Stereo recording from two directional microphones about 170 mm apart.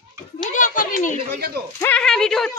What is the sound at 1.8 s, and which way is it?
Speech, 5° left (ahead or behind).